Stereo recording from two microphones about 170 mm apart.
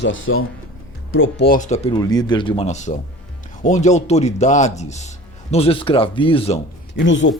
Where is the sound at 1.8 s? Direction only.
25° left (ahead or behind).